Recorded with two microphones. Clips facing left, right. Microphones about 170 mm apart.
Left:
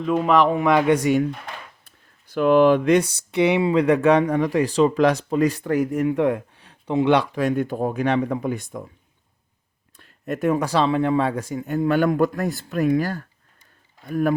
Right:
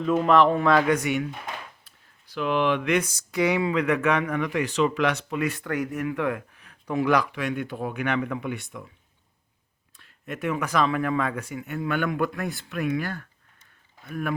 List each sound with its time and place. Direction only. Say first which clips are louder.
0.1 s speech: left 1 dB; 10° left (ahead or behind)
1.0 s speech: left 7 dB; 40° left (ahead or behind)
2.3 s speech: left 9 dB; 45° left (ahead or behind); by 7.3 s 25° left (ahead or behind)
7.3 s speech: left 7 dB; 40° left (ahead or behind)
10.0 s speech: left 7 dB; 40° left (ahead or behind)